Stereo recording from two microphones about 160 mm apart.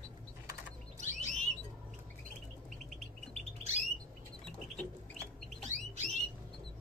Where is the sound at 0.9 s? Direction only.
50° right (ahead or behind).